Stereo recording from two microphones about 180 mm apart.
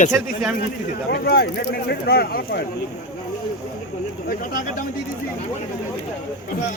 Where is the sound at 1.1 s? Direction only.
60° left (ahead or behind).